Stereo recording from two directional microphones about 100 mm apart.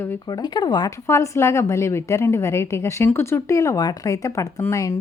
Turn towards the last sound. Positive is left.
turn(degrees=30)  # may be behind; listen again after turning